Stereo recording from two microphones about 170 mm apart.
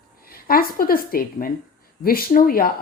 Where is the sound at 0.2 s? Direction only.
60° left (ahead or behind).